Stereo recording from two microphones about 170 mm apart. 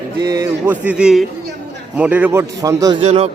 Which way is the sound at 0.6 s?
10° right (ahead or behind).